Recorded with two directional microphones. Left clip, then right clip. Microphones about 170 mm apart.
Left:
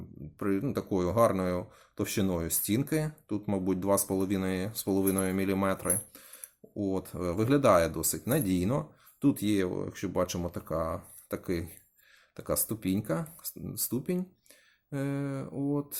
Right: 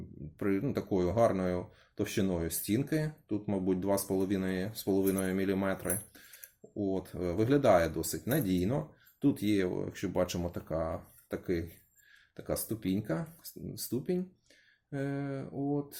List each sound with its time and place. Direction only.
0.3 s speech: 15° left (ahead or behind)